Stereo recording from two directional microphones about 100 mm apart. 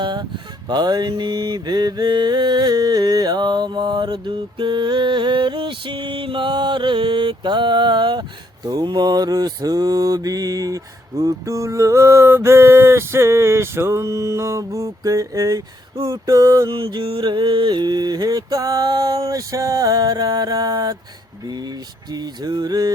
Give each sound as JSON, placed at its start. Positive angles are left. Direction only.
{"t": 0.0, "sound": "a sound", "side_deg": -50}
{"t": 0.7, "sound": "mantra", "side_deg": -45}
{"t": 16.7, "sound": "mantra", "side_deg": -60}